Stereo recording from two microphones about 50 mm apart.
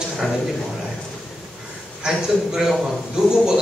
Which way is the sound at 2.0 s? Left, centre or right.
Centre.